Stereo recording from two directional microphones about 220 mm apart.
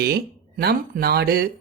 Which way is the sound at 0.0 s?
45° right (ahead or behind).